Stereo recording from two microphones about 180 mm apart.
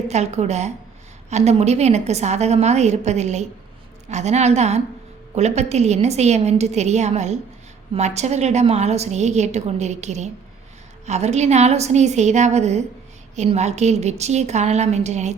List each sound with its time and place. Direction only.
0.1 s a woman's voice: 40° right (ahead or behind)